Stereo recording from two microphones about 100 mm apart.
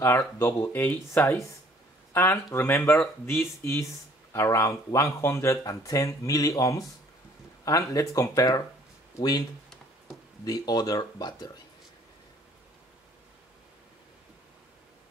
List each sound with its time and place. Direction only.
0.0 s speech: 30° left (ahead or behind)
10.4 s speech: 40° left (ahead or behind)